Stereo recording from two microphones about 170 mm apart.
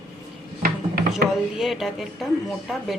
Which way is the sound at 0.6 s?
65° right (ahead or behind).